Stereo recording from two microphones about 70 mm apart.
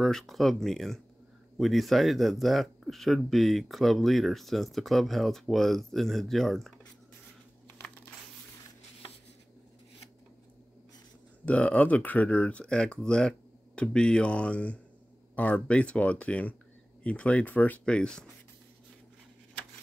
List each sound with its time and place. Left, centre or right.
0.0 s speech: centre
11.4 s speech: centre
17.8 s speech: centre